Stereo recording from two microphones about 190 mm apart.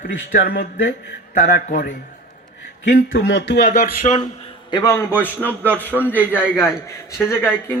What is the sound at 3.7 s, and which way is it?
Speech, 45° left (ahead or behind).